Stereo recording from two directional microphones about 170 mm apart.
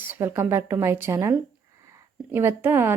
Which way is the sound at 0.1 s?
15° right (ahead or behind).